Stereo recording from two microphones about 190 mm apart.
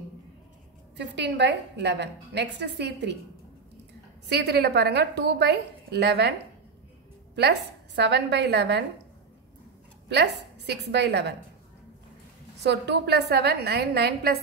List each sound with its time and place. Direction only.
0.9 s a woman's voice: 65° right (ahead or behind)
4.3 s a woman's voice: 60° right (ahead or behind)
7.3 s a woman's voice: 60° right (ahead or behind)
10.0 s a woman's voice: 65° right (ahead or behind)
12.6 s a woman's voice: 60° right (ahead or behind)